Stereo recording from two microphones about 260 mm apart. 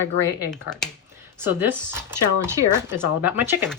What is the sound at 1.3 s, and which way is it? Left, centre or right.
Speech, centre.